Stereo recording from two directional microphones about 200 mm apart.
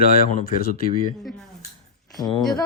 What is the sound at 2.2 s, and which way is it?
Speech, 20° left (ahead or behind).